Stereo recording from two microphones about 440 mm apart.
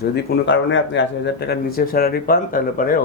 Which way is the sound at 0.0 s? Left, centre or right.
Left.